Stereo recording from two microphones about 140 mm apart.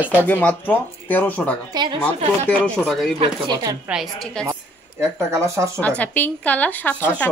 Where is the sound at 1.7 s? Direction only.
30° right (ahead or behind).